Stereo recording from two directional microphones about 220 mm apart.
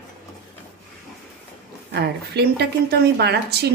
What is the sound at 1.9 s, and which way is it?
A woman's voice, 50° right (ahead or behind).